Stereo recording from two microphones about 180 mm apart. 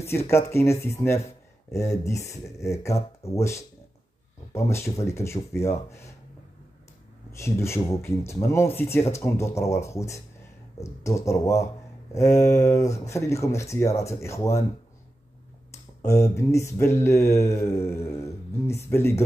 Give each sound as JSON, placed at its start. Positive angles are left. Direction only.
{"t": 0.0, "sound": "speech", "side_deg": 15}
{"t": 7.3, "sound": "speech", "side_deg": 15}
{"t": 15.7, "sound": "speech", "side_deg": 15}